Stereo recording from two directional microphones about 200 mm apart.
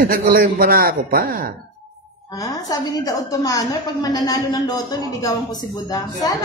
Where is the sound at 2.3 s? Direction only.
15° left (ahead or behind).